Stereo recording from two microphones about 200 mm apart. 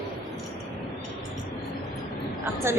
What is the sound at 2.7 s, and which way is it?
Speech, 15° right (ahead or behind).